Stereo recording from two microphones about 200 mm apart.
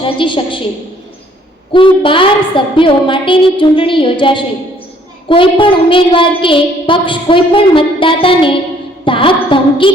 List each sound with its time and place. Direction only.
0.0 s child singing: 25° left (ahead or behind)
1.7 s child singing: 25° left (ahead or behind)